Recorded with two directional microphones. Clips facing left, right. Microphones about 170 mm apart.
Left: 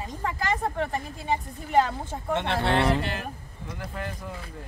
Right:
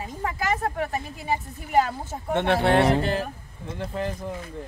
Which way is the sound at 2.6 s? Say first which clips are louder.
Right 3 dB; 45° right (ahead or behind).